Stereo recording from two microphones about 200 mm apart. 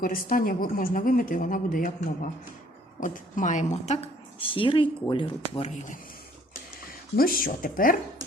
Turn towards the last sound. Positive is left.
turn(degrees=45)  # may be behind; listen again after turning